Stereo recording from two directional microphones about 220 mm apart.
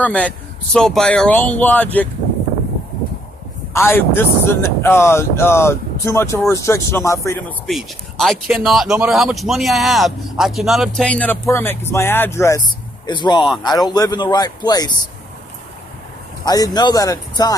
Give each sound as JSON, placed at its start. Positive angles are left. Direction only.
{"t": 0.0, "sound": "speech", "side_deg": 5}
{"t": 3.7, "sound": "speech", "side_deg": 10}
{"t": 7.7, "sound": "speech", "side_deg": 0}
{"t": 16.5, "sound": "speech", "side_deg": 20}